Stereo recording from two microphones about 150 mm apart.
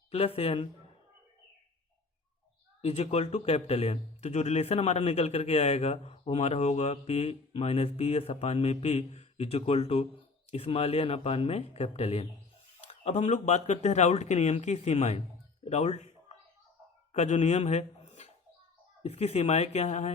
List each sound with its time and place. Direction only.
0.1 s speech: 40° left (ahead or behind)
2.8 s speech: 45° left (ahead or behind)